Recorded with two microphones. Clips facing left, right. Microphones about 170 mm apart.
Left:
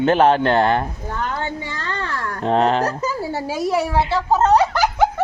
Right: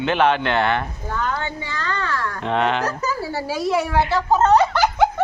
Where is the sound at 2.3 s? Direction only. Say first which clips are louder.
Left 5 dB; 35° left (ahead or behind).